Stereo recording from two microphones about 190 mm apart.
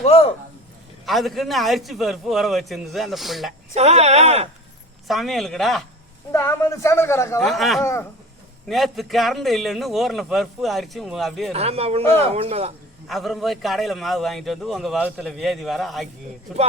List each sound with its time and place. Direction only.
0.0 s speech: 30° left (ahead or behind)
1.0 s a man's voice: centre (ahead or behind)
3.8 s speech: 35° right (ahead or behind)
5.0 s a man's voice: centre (ahead or behind)
6.3 s a man's voice: 15° left (ahead or behind)
7.4 s a man's voice: centre (ahead or behind)
11.5 s speech: 35° right (ahead or behind)
13.1 s a man's voice: centre (ahead or behind)